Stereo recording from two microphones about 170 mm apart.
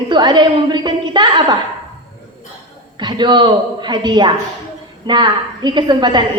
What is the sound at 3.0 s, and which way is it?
A woman's voice, 25° right (ahead or behind).